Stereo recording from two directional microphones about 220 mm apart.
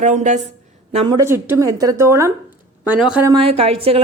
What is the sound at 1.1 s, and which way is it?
A woman's voice, 10° right (ahead or behind).